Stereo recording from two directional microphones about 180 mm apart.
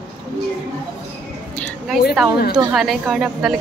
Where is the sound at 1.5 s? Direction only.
Centre (ahead or behind).